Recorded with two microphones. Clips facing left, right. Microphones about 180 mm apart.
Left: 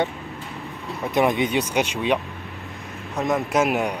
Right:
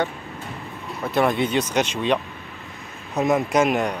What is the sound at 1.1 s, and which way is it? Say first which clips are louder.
Speech: even; 15° left (ahead or behind).